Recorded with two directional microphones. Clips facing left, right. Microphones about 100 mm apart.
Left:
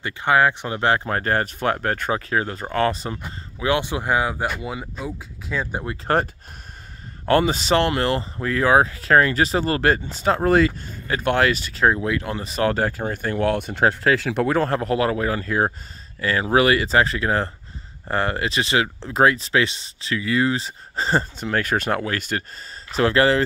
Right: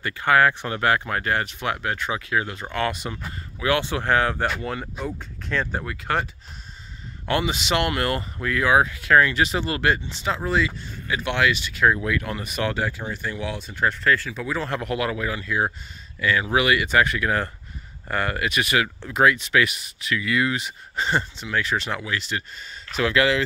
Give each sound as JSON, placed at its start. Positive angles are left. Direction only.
{"t": 0.0, "sound": "speech", "side_deg": 20}
{"t": 3.2, "sound": "speech", "side_deg": 20}
{"t": 6.1, "sound": "speech", "side_deg": 35}
{"t": 7.2, "sound": "speech", "side_deg": 40}
{"t": 14.0, "sound": "speech", "side_deg": 90}
{"t": 14.7, "sound": "speech", "side_deg": 35}
{"t": 22.9, "sound": "speech", "side_deg": 35}